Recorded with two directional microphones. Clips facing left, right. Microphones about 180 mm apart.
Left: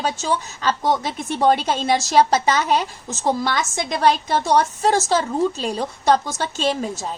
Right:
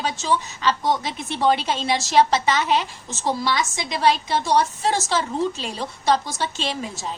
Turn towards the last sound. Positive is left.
turn(degrees=40)  # may be behind; listen again after turning